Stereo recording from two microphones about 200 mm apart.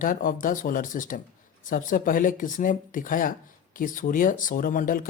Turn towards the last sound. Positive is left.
turn(degrees=40)  # may be behind; listen again after turning